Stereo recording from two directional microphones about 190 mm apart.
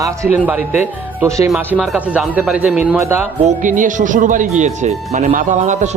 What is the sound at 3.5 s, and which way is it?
Speech, 40° right (ahead or behind).